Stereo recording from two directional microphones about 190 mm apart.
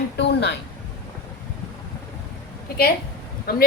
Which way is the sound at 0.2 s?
65° left (ahead or behind).